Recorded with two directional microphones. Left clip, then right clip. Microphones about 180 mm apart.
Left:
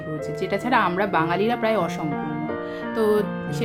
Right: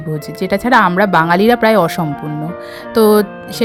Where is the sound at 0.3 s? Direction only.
60° right (ahead or behind).